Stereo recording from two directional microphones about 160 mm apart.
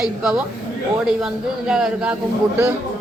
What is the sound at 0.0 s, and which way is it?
A man's voice, 5° right (ahead or behind).